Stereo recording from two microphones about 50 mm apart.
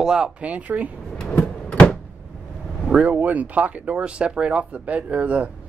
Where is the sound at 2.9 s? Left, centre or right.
Right.